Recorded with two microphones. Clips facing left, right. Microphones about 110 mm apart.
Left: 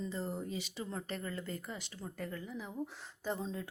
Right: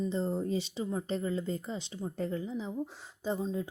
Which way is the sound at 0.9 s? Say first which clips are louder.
Right 8 dB; 15° right (ahead or behind).